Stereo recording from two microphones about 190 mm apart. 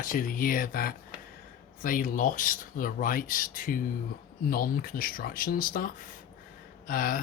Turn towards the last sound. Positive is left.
turn(degrees=45)  # may be behind; listen again after turning